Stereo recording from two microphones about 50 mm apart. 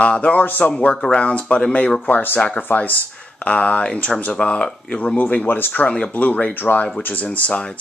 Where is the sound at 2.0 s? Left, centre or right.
Left.